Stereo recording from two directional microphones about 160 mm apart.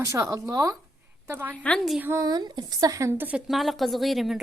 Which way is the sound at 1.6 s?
5° left (ahead or behind).